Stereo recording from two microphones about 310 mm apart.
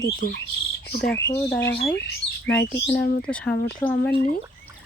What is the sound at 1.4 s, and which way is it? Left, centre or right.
Speech, centre.